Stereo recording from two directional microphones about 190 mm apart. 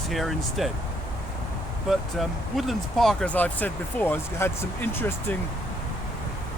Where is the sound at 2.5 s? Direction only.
Centre (ahead or behind).